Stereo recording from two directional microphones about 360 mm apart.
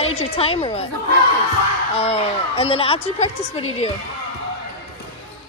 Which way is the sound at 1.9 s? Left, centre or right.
Centre.